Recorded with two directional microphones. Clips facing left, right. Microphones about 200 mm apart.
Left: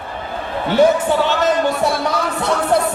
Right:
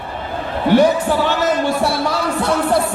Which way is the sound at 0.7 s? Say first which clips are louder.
Left 1 dB; 20° left (ahead or behind).